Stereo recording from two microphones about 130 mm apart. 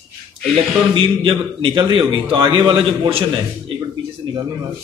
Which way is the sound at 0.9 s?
40° right (ahead or behind).